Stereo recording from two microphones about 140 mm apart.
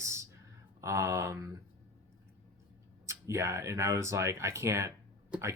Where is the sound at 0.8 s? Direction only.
20° right (ahead or behind).